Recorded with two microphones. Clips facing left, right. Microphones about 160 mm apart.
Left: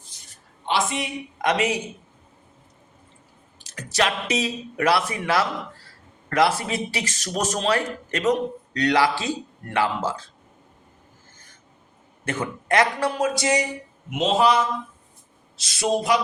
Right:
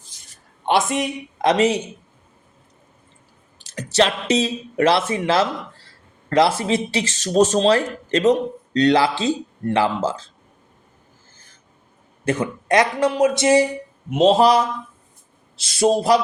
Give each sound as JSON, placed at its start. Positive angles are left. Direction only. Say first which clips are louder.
{"t": 0.1, "sound": "a sound", "louder": "even", "side_deg": -90}
{"t": 0.6, "sound": "speech", "louder": "right 5 dB", "side_deg": -50}
{"t": 1.4, "sound": "a man's voice", "louder": "right 6 dB", "side_deg": -30}
{"t": 3.6, "sound": "speech", "louder": "right 5 dB", "side_deg": -30}
{"t": 12.4, "sound": "speech", "louder": "right 2 dB", "side_deg": -20}
{"t": 14.1, "sound": "a sound", "louder": "right 6 dB", "side_deg": -35}
{"t": 15.5, "sound": "speech", "louder": "right 6 dB", "side_deg": -30}